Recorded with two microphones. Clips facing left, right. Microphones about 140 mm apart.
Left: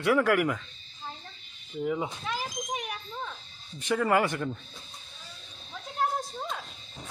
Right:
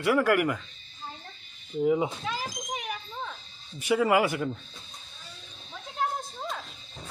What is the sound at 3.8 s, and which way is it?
Speech, 10° right (ahead or behind).